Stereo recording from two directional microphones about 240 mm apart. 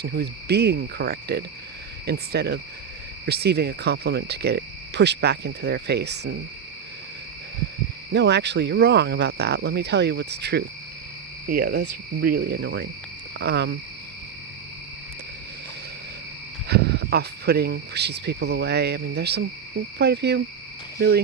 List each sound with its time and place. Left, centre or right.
0.0 s speech: right
8.1 s speech: right
16.6 s speech: right